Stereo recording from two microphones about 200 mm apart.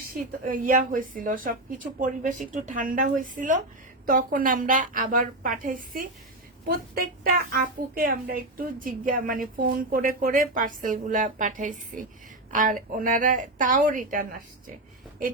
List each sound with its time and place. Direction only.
0.4 s a woman's voice: 40° right (ahead or behind)